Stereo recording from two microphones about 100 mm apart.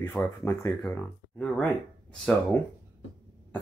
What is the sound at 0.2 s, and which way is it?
Speech, 15° left (ahead or behind).